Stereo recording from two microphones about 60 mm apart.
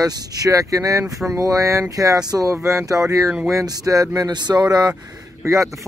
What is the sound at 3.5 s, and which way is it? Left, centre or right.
Speech, right.